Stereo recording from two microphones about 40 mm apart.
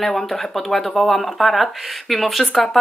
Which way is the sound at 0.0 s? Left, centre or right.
Centre.